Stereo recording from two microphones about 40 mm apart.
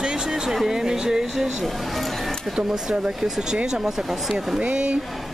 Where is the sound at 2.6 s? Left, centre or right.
Right.